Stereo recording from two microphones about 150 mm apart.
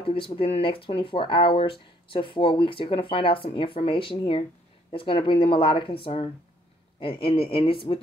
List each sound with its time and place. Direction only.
0.0 s speech: 35° left (ahead or behind)